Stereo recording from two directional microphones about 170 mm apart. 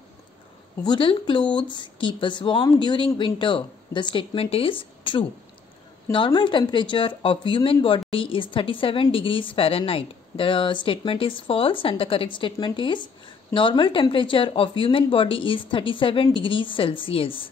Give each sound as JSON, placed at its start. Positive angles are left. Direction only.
{"t": 0.8, "sound": "speech", "side_deg": 30}